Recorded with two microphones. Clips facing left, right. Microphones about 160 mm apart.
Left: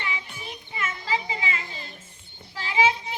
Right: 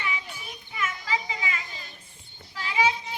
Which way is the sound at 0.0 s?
30° left (ahead or behind).